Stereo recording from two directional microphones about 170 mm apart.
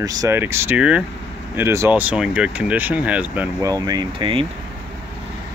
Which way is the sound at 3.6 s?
20° right (ahead or behind).